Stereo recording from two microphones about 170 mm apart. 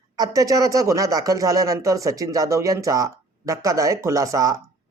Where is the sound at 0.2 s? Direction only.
20° right (ahead or behind).